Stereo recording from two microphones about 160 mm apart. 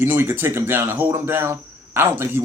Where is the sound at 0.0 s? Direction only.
15° right (ahead or behind).